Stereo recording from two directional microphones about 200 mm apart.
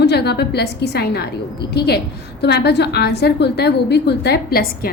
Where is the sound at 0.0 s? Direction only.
55° left (ahead or behind).